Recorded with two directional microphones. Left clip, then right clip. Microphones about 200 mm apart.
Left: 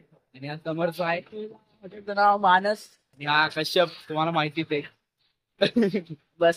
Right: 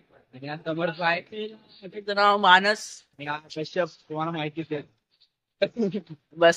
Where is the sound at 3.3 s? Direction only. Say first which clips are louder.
Left 10 dB; 60° left (ahead or behind).